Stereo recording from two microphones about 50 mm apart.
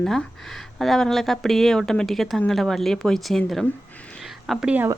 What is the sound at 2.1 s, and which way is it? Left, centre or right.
Speech, centre.